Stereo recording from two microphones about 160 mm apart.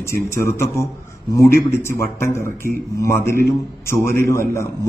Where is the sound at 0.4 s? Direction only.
15° left (ahead or behind).